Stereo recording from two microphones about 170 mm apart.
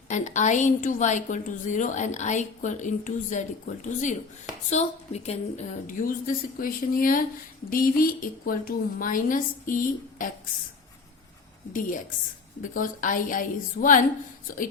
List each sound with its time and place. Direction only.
0.1 s a woman's voice: 45° left (ahead or behind)
11.7 s a woman's voice: 50° left (ahead or behind)